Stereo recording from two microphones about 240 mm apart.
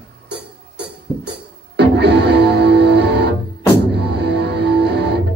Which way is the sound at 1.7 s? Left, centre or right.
Right.